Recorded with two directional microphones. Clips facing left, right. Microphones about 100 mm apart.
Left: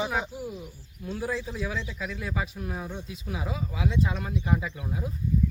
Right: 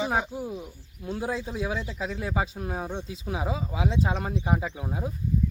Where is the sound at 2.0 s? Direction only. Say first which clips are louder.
Right 5 dB; 25° right (ahead or behind).